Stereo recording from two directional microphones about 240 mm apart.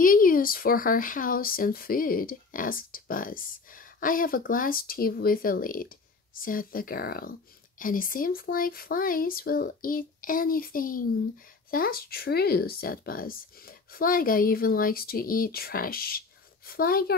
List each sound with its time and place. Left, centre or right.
0.0 s speech: left